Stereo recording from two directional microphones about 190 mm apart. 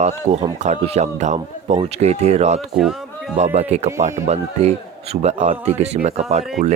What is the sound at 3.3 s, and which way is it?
Speech, 35° right (ahead or behind).